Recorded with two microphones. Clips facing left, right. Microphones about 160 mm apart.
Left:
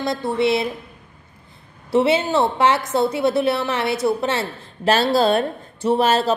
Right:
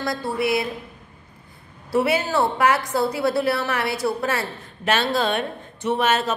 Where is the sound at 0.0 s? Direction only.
25° left (ahead or behind).